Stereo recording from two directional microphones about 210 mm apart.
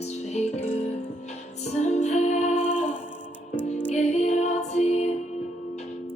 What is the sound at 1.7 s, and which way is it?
Music, 35° left (ahead or behind).